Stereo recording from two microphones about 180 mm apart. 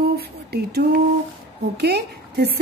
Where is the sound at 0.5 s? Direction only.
60° right (ahead or behind).